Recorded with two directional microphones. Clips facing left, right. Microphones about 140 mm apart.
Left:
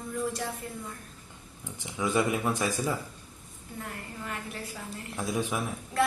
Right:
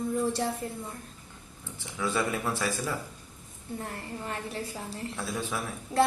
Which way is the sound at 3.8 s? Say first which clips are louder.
Even; 30° right (ahead or behind).